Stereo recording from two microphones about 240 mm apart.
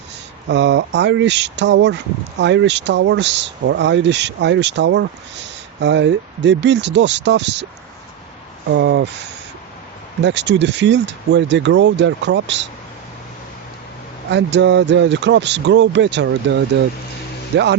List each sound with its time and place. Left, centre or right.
0.4 s speech: right
8.7 s speech: right
10.2 s speech: right
14.3 s speech: right